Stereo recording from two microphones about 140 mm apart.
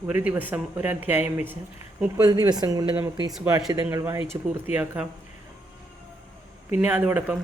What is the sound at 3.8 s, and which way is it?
A man's voice, 15° right (ahead or behind).